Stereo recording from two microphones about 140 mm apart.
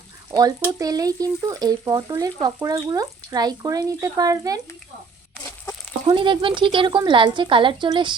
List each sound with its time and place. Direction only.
0.3 s speech: 30° right (ahead or behind)
6.1 s a woman's voice: 35° right (ahead or behind)